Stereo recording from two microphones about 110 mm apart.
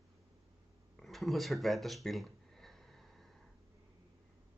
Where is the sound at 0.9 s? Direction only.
Centre (ahead or behind).